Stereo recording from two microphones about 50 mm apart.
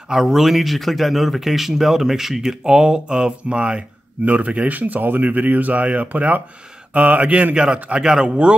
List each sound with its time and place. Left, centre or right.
0.1 s a man's voice: centre; by 7.6 s right
7.9 s a man's voice: centre